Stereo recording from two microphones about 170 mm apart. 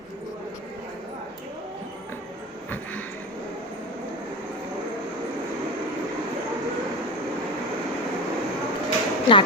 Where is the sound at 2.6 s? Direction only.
10° left (ahead or behind).